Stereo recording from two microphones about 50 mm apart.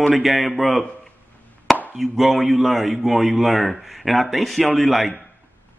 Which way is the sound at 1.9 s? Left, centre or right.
Centre.